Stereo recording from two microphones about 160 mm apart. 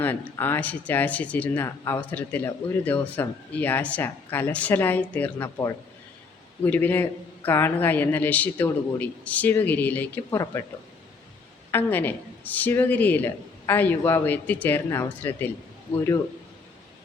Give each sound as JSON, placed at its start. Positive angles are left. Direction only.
{"t": 0.0, "sound": "speech", "side_deg": 10}
{"t": 11.7, "sound": "speech", "side_deg": 10}